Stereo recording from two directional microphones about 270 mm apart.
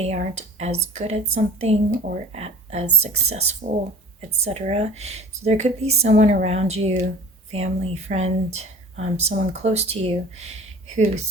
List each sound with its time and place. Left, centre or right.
0.0 s speech: right